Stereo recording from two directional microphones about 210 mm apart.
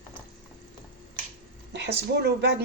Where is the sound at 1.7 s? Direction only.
55° right (ahead or behind).